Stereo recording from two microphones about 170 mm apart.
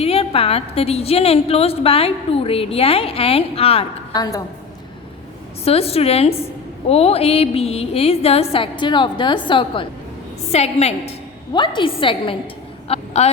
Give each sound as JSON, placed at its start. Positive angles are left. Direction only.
{"t": 0.0, "sound": "a woman's voice", "side_deg": 35}
{"t": 4.1, "sound": "a woman's voice", "side_deg": 20}
{"t": 5.6, "sound": "a woman's voice", "side_deg": 35}
{"t": 11.5, "sound": "a woman's voice", "side_deg": 25}